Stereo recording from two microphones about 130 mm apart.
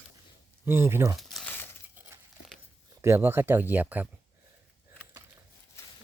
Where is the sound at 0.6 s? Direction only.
20° right (ahead or behind).